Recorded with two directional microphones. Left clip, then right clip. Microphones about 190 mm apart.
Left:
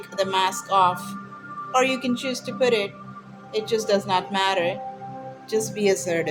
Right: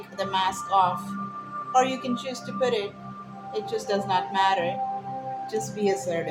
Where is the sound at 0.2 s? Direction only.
40° left (ahead or behind).